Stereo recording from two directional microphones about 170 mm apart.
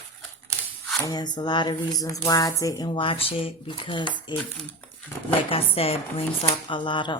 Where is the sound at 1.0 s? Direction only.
25° left (ahead or behind).